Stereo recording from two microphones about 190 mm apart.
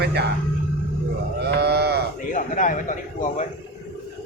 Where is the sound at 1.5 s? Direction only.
60° right (ahead or behind).